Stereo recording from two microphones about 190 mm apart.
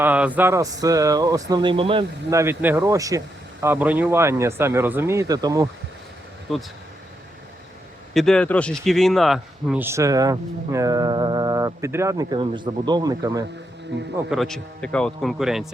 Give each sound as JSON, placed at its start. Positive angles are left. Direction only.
{"t": 0.0, "sound": "speech", "side_deg": -10}
{"t": 2.3, "sound": "speech", "side_deg": -15}
{"t": 8.1, "sound": "speech", "side_deg": 0}
{"t": 9.8, "sound": "speech", "side_deg": -15}
{"t": 13.9, "sound": "speech", "side_deg": -65}
{"t": 14.3, "sound": "speech", "side_deg": 0}